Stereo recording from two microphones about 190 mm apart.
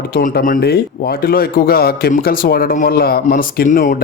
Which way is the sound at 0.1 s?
50° left (ahead or behind).